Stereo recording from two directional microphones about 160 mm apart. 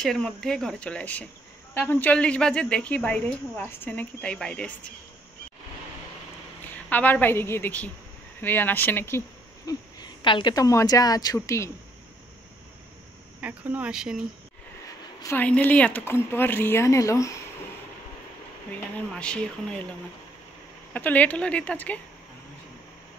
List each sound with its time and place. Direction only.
0.0 s a woman's voice: 5° left (ahead or behind)
6.9 s a woman's voice: 10° left (ahead or behind)
9.7 s a woman's voice: 25° left (ahead or behind)
13.4 s speech: 10° right (ahead or behind)
15.2 s a woman's voice: 10° left (ahead or behind)
18.7 s a woman's voice: 5° left (ahead or behind)